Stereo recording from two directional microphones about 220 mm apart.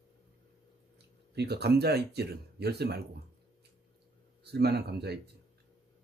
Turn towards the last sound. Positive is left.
turn(degrees=-50)  # may be behind; listen again after turning